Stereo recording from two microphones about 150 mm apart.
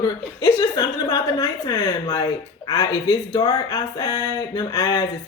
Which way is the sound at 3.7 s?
20° left (ahead or behind).